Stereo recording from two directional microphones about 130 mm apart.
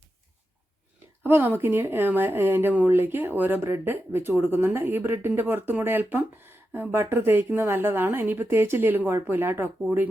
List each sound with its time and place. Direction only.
1.2 s speech: 15° right (ahead or behind)